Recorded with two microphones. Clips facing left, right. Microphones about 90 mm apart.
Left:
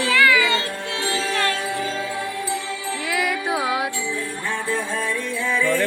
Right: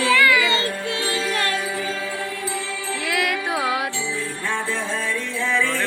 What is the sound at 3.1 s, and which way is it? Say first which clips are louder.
Music: left 1 dB; centre (ahead or behind).